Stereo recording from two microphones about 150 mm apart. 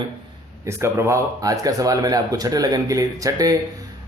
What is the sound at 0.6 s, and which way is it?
Speech, 15° right (ahead or behind).